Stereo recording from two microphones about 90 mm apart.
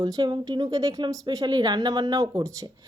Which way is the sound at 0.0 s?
50° right (ahead or behind).